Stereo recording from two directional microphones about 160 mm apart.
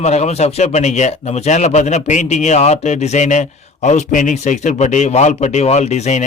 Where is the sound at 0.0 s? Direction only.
45° left (ahead or behind).